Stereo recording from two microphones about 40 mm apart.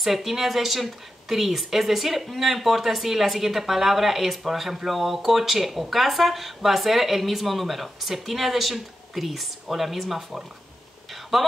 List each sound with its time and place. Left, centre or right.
0.0 s speech: centre